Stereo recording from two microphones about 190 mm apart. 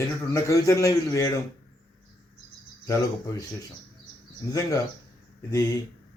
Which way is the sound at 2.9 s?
15° left (ahead or behind).